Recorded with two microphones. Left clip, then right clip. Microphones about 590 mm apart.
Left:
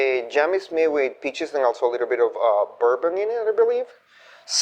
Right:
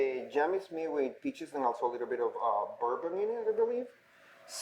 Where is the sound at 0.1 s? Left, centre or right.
Left.